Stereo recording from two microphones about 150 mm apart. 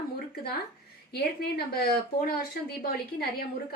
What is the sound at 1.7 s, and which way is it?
Speech, 90° left.